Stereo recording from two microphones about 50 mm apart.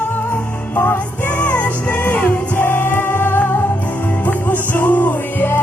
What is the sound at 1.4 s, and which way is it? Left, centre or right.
Music, left.